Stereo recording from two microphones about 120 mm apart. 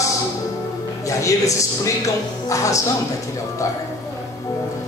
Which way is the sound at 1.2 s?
25° left (ahead or behind).